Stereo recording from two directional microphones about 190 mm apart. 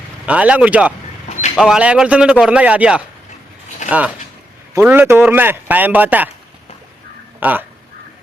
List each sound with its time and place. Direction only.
0.3 s a man's voice: 5° right (ahead or behind)
1.3 s a sound: 35° left (ahead or behind)
1.5 s a man's voice: 5° right (ahead or behind)
7.3 s speech: 10° right (ahead or behind)